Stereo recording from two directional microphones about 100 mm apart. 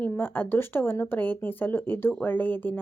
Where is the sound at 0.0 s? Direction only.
20° left (ahead or behind).